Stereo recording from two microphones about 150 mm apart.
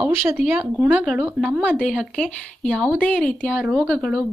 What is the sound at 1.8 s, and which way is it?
Speech, 5° left (ahead or behind).